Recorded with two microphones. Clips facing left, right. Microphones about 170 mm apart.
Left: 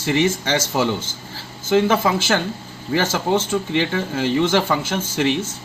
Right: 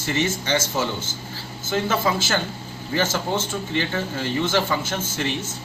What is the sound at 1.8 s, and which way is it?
Speech, 85° left.